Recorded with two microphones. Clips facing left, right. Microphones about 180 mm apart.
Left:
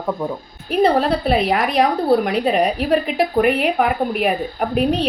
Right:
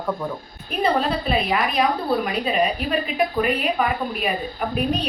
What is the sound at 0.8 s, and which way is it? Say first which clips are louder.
A woman's voice: left 5 dB; 70° left (ahead or behind).